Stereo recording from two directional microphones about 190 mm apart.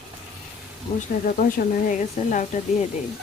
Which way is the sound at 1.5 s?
40° left (ahead or behind).